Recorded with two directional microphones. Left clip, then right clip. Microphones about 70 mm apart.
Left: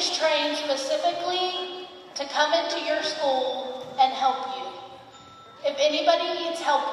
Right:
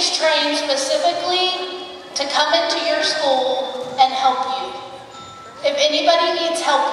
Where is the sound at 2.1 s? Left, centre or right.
Right.